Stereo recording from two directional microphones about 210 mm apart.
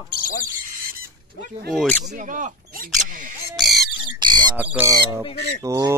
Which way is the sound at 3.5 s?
Centre (ahead or behind).